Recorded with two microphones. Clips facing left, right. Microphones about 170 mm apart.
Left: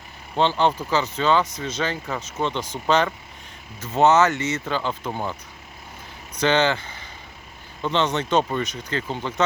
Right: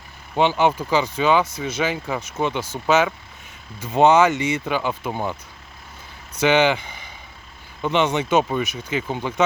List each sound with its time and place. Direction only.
0.3 s speech: 10° right (ahead or behind)
6.3 s a sound: 10° right (ahead or behind)
7.8 s speech: 10° right (ahead or behind)